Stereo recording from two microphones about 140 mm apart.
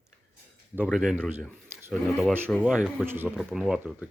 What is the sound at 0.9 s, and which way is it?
Speech, centre (ahead or behind).